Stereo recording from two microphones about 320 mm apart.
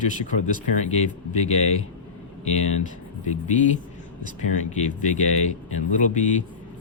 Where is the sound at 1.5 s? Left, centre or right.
Left.